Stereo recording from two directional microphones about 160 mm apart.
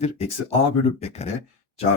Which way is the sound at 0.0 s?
40° left (ahead or behind).